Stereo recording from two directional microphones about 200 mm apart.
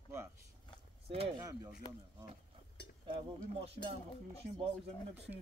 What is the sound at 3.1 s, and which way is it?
Cutlery, 25° right (ahead or behind).